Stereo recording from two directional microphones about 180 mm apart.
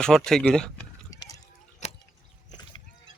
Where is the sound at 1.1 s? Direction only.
20° left (ahead or behind).